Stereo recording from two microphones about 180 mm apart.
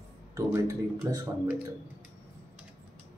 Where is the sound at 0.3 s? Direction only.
15° right (ahead or behind).